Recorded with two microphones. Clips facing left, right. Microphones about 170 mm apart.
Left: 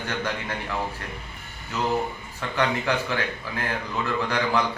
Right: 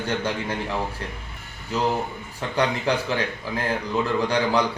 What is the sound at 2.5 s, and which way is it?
Speech, 35° right (ahead or behind).